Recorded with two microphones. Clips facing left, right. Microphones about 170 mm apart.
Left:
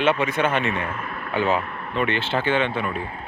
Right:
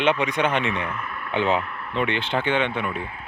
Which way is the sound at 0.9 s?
35° left (ahead or behind).